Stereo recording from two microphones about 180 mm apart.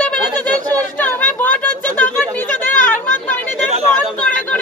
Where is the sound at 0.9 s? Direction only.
10° left (ahead or behind).